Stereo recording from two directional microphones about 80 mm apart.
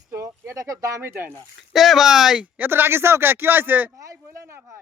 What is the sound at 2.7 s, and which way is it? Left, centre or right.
Speech, right.